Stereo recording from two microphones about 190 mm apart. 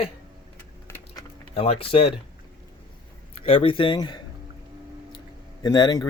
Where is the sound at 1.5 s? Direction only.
30° left (ahead or behind).